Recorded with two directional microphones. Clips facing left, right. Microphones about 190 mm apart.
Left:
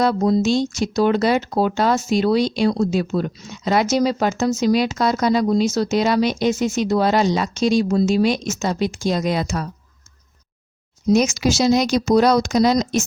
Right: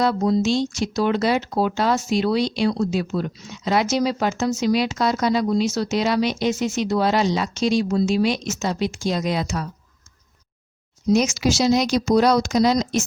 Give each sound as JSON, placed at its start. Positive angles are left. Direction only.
{"t": 0.0, "sound": "speech", "side_deg": 45}
{"t": 11.1, "sound": "speech", "side_deg": 50}